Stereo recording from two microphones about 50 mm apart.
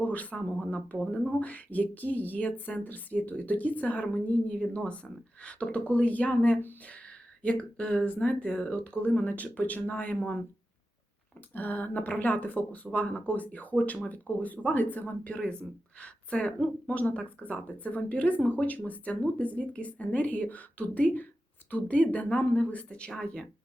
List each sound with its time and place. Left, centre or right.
0.0 s speech: left
11.5 s speech: left; by 23.5 s centre